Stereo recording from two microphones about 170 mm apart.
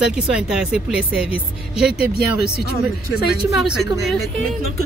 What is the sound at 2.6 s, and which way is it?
Speech, 70° left (ahead or behind).